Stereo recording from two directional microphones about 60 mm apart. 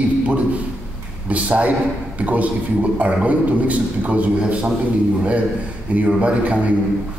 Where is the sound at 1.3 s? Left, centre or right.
Right.